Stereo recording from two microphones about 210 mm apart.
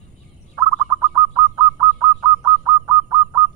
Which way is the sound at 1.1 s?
20° right (ahead or behind).